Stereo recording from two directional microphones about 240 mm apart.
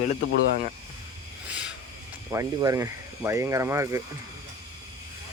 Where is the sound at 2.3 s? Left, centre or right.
Centre.